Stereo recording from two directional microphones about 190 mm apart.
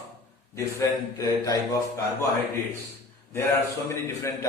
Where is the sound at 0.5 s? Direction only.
15° left (ahead or behind).